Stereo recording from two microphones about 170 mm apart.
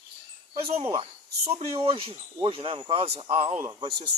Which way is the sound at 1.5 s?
35° right (ahead or behind).